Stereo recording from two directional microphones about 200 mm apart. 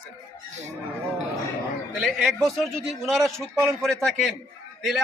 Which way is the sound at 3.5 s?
10° right (ahead or behind).